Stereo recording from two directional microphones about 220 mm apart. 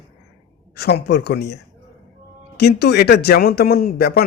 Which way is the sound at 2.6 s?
45° left (ahead or behind).